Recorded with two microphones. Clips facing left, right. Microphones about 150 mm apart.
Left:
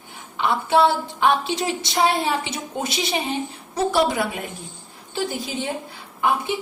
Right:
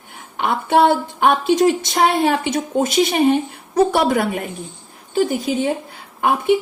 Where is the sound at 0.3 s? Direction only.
50° right (ahead or behind).